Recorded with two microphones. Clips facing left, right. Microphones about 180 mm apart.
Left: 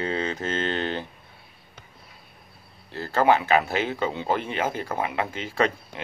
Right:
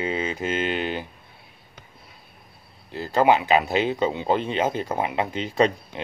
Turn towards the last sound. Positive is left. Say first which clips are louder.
# right 4 dB
turn(degrees=-20)  # may be behind; listen again after turning